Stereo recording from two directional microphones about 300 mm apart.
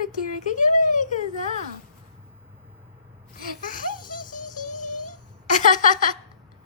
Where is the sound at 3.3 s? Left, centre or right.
Left.